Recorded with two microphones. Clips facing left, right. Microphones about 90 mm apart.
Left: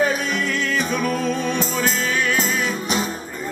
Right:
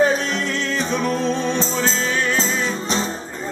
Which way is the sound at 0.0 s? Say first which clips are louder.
Right 2 dB; 25° right (ahead or behind).